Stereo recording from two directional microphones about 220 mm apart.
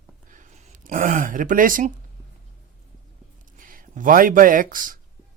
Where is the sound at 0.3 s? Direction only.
35° right (ahead or behind).